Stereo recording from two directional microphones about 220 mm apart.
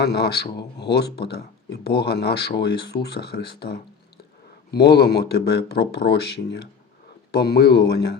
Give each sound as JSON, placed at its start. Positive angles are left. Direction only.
{"t": 0.0, "sound": "speech", "side_deg": 50}